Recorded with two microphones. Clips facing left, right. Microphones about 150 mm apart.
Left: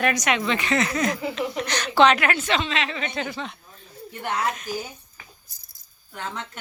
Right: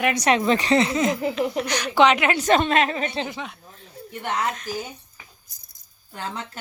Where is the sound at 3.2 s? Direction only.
20° right (ahead or behind).